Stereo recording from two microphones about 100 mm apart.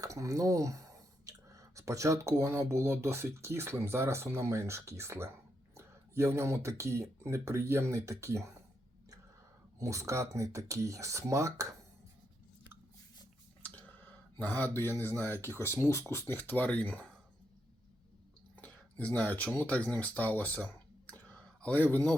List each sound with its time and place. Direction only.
0.0 s speech: 35° right (ahead or behind)
9.8 s speech: 30° right (ahead or behind)
13.6 s a sound: 15° left (ahead or behind)
15.4 s speech: 25° left (ahead or behind)
18.5 s speech: 15° left (ahead or behind)
21.1 s clicking: 10° left (ahead or behind)